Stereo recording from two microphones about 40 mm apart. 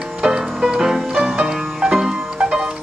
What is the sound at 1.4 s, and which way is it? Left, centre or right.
Music, centre.